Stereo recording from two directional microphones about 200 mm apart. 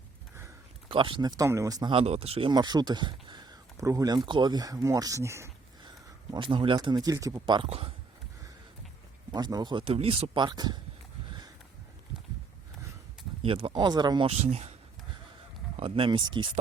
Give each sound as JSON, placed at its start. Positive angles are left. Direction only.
{"t": 0.9, "sound": "speech", "side_deg": -25}
{"t": 6.3, "sound": "speech", "side_deg": -25}
{"t": 9.3, "sound": "speech", "side_deg": -20}
{"t": 13.4, "sound": "speech", "side_deg": -30}
{"t": 15.8, "sound": "speech", "side_deg": -25}